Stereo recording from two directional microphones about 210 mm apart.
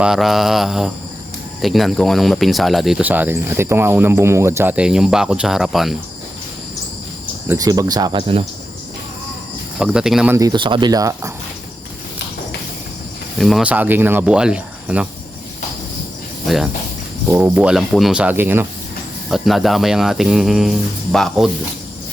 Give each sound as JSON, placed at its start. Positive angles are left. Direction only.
{"t": 0.0, "sound": "speech", "side_deg": 0}
{"t": 7.4, "sound": "speech", "side_deg": -15}
{"t": 9.7, "sound": "speech", "side_deg": -5}
{"t": 10.3, "sound": "speech", "side_deg": -20}
{"t": 13.4, "sound": "speech", "side_deg": -5}
{"t": 17.2, "sound": "speech", "side_deg": -10}